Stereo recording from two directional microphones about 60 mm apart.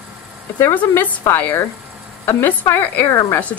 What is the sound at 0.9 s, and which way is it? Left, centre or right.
Speech, left.